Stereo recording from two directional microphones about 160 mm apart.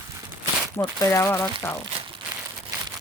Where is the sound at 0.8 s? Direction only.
20° left (ahead or behind).